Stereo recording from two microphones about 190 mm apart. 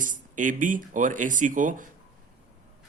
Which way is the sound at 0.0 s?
45° right (ahead or behind).